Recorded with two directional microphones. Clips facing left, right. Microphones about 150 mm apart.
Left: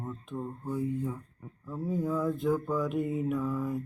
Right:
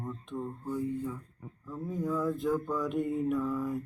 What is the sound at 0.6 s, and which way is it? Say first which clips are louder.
Speech: left 2 dB; 15° left (ahead or behind).